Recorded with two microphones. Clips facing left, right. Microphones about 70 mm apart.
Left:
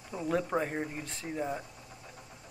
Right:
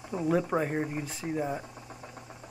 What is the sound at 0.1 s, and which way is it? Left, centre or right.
Speech, centre.